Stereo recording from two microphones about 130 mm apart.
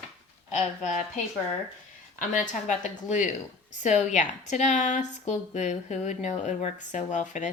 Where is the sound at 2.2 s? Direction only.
80° left.